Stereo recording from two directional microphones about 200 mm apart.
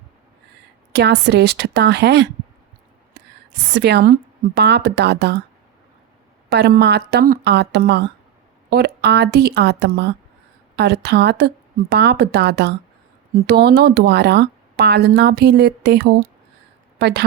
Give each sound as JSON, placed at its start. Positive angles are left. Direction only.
{"t": 0.9, "sound": "a woman's voice", "side_deg": -55}
{"t": 3.8, "sound": "a woman's voice", "side_deg": -55}
{"t": 6.5, "sound": "a woman's voice", "side_deg": -55}